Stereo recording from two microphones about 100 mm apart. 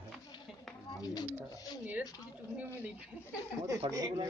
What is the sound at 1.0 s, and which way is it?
Speech, 40° left (ahead or behind).